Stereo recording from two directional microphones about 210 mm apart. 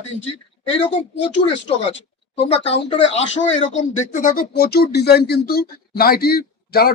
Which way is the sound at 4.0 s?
40° left (ahead or behind).